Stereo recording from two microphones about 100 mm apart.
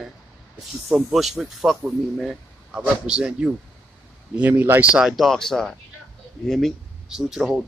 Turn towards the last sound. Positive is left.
turn(degrees=-5)  # may be behind; listen again after turning